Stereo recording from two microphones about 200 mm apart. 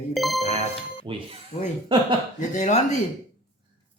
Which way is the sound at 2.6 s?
35° left (ahead or behind).